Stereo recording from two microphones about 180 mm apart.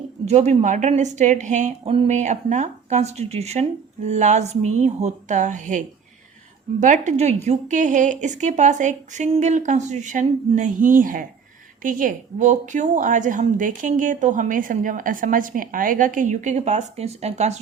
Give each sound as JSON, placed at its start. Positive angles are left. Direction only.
{"t": 0.3, "sound": "a woman's voice", "side_deg": -40}